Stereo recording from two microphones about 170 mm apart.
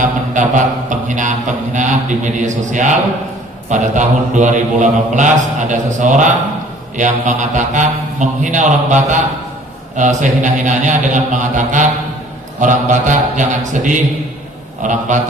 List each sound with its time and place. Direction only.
0.0 s mantra: 50° right (ahead or behind)